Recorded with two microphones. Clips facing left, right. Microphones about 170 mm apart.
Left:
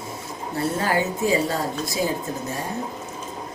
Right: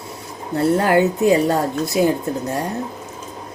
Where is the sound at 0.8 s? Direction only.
65° right (ahead or behind).